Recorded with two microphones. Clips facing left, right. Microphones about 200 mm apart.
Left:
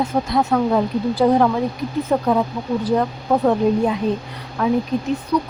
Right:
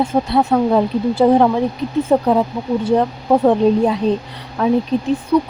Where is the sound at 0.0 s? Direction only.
30° right (ahead or behind).